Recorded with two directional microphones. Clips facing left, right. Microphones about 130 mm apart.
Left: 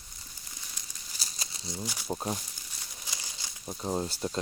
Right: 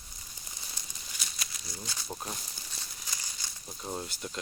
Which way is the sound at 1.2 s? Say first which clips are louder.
Left 1 dB; 30° left (ahead or behind).